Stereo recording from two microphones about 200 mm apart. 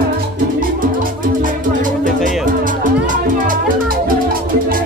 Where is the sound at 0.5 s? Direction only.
45° right (ahead or behind).